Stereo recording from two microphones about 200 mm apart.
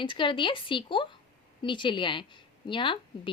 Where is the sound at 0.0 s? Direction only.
25° left (ahead or behind).